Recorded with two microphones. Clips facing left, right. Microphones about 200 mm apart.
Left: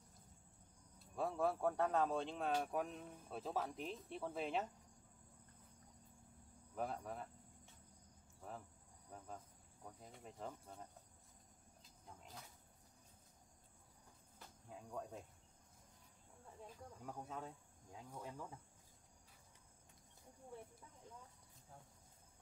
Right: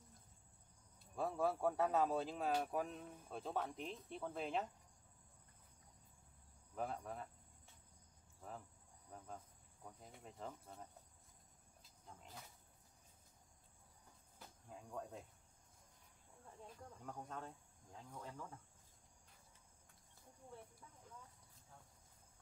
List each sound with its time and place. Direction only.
0.9 s speech: centre (ahead or behind)
6.7 s speech: centre (ahead or behind)
8.4 s speech: 5° left (ahead or behind)
9.8 s speech: centre (ahead or behind)
12.1 s vehicle: centre (ahead or behind)
14.7 s speech: centre (ahead or behind)
16.4 s cricket: 5° left (ahead or behind)